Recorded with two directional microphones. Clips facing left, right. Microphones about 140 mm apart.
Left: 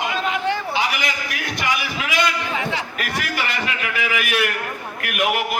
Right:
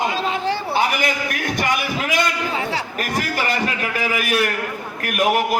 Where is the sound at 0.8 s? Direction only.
50° right (ahead or behind).